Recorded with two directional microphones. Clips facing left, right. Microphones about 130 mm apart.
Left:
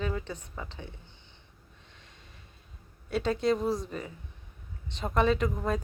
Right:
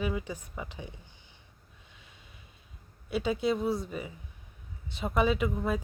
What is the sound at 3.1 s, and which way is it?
Speech, 5° right (ahead or behind).